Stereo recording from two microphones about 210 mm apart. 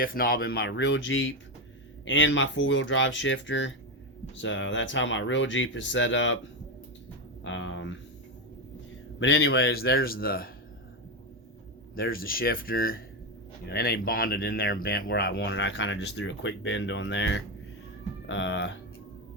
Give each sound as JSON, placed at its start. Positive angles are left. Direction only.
{"t": 0.0, "sound": "speech", "side_deg": 45}
{"t": 7.4, "sound": "speech", "side_deg": 65}
{"t": 9.1, "sound": "speech", "side_deg": 55}
{"t": 11.9, "sound": "speech", "side_deg": 45}